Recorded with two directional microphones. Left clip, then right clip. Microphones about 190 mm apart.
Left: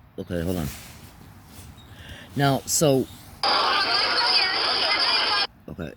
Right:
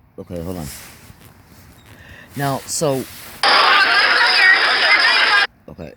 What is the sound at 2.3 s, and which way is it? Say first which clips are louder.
Speech: right 1 dB; 10° right (ahead or behind).